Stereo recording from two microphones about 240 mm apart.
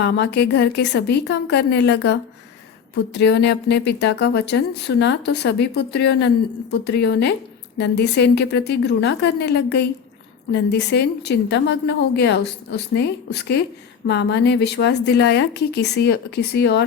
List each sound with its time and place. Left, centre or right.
0.0 s a woman's voice: left